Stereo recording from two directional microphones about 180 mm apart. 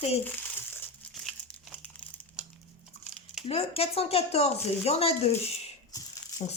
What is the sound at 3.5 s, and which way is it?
Speech, 35° left (ahead or behind).